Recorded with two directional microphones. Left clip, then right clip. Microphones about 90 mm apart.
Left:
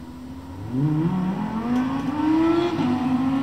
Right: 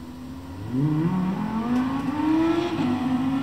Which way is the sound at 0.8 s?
Centre (ahead or behind).